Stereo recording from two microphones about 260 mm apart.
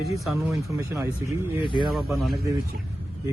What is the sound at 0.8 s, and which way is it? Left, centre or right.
Speech, centre.